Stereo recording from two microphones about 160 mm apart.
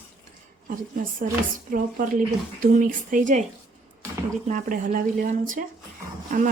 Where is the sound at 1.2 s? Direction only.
60° right (ahead or behind).